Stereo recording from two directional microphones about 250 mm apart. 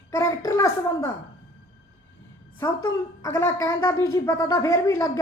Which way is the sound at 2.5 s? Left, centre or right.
Centre.